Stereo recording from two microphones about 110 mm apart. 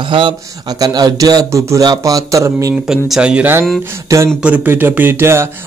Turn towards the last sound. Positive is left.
turn(degrees=-25)  # may be behind; listen again after turning